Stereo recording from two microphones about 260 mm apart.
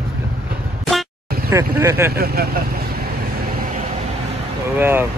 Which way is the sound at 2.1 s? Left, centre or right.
Right.